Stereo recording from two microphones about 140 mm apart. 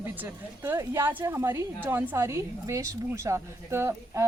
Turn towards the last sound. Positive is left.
turn(degrees=-20)  # may be behind; listen again after turning